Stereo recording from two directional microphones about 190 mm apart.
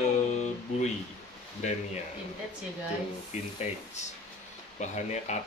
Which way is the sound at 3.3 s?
35° left (ahead or behind).